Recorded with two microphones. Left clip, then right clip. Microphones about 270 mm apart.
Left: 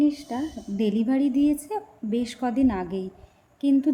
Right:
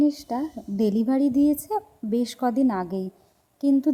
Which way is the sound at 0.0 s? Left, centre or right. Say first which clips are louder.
Right 1 dB; centre.